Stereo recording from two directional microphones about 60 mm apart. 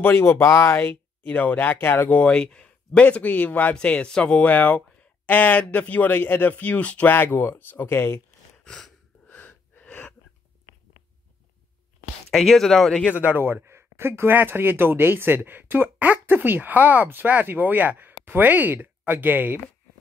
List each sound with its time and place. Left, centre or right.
0.0 s speech: left
2.0 s speech: left
4.5 s speech: left
7.1 s speech: left
8.6 s a sound: centre
9.3 s gasp: left
12.3 s speech: centre
13.4 s speech: right